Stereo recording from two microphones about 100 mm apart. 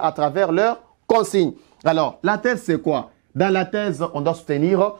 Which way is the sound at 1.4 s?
15° right (ahead or behind).